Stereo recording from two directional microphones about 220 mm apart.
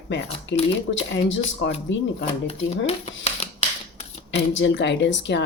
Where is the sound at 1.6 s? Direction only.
55° left (ahead or behind).